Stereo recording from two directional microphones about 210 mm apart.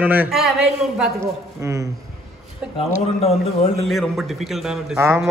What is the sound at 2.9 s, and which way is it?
Speech, 30° left (ahead or behind).